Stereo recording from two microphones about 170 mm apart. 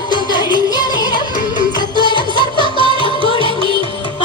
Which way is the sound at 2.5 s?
30° right (ahead or behind).